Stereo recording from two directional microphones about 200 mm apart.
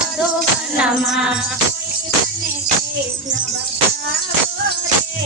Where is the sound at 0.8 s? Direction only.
5° right (ahead or behind).